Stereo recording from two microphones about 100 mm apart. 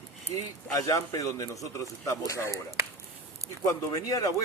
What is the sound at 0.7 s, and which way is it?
Speech, 35° left (ahead or behind).